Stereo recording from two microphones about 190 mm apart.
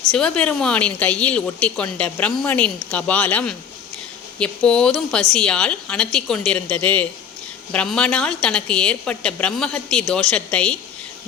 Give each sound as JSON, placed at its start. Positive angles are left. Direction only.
{"t": 0.1, "sound": "a woman's voice", "side_deg": 5}